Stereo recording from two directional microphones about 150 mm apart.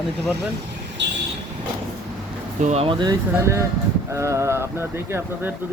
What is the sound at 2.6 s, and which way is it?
Speech, 45° right (ahead or behind).